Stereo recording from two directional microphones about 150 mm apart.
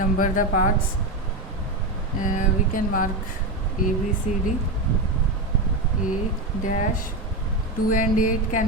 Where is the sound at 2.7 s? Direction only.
65° left (ahead or behind).